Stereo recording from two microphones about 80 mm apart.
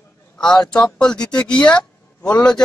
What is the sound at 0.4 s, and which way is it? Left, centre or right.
Speech, centre.